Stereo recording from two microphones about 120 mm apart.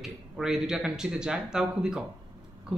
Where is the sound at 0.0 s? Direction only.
5° right (ahead or behind).